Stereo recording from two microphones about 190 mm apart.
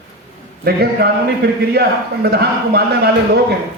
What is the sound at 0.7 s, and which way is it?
A man's voice, 55° right (ahead or behind).